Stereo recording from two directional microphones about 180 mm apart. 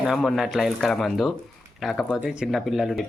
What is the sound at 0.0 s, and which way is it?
Speech, centre (ahead or behind).